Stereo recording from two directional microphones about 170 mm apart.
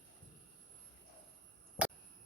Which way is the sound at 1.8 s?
10° right (ahead or behind).